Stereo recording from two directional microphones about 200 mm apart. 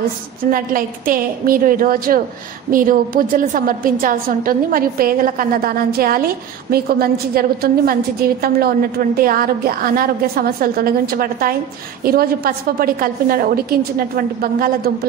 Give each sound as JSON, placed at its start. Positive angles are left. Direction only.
{"t": 0.5, "sound": "a woman's voice", "side_deg": -45}